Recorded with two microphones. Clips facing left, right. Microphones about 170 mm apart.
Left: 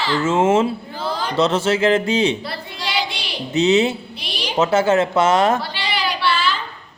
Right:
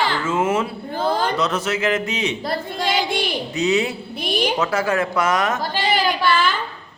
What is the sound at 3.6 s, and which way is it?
Speech, 25° left (ahead or behind).